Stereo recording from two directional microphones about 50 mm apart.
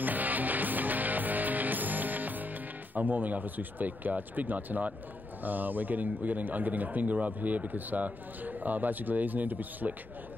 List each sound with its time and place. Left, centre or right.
0.0 s music: right
5.4 s a man's voice: right